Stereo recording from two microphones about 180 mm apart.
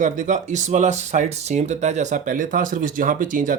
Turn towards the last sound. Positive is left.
turn(degrees=-45)  # may be behind; listen again after turning